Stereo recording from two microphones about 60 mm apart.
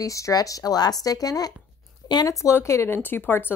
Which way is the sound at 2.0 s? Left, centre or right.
Left.